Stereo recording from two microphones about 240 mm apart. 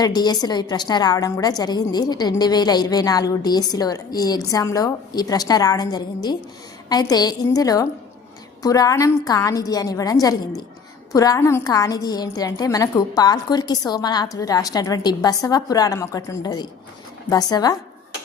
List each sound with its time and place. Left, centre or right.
0.0 s a woman's voice: centre